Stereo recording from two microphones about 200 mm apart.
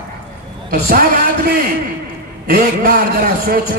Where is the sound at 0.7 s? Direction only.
45° right (ahead or behind).